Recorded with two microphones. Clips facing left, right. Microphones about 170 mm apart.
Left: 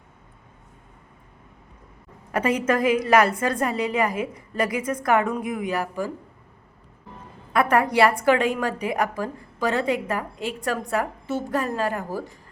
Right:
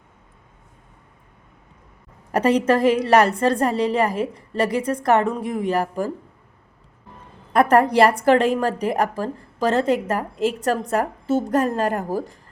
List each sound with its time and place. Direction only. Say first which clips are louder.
2.6 s a woman's voice: right 3 dB; 30° right (ahead or behind)
7.5 s a woman's voice: right 4 dB; 40° right (ahead or behind)